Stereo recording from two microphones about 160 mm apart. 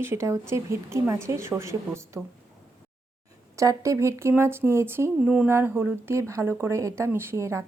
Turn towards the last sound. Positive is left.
turn(degrees=-20)  # may be behind; listen again after turning